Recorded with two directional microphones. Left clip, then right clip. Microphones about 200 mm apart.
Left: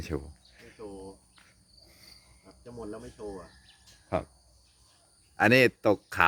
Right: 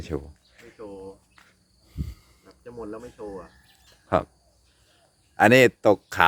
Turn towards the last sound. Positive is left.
turn(degrees=-15)  # may be behind; listen again after turning